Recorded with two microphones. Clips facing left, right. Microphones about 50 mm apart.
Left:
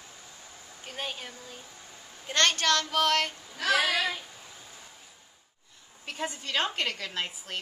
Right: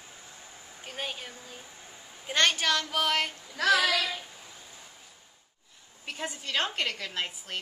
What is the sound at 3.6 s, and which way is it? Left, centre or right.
Speech, right.